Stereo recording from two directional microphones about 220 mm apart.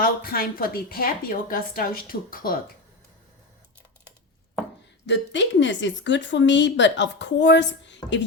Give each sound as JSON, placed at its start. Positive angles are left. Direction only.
{"t": 0.0, "sound": "a woman's voice", "side_deg": 40}
{"t": 5.0, "sound": "a woman's voice", "side_deg": 55}